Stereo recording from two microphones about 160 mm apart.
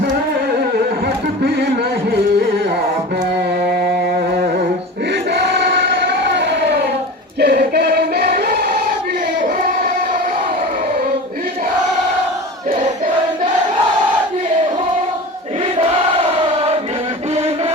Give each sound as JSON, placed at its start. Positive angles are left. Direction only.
{"t": 5.3, "sound": "a sound", "side_deg": -90}
{"t": 7.3, "sound": "choir", "side_deg": -80}
{"t": 16.4, "sound": "chant", "side_deg": -35}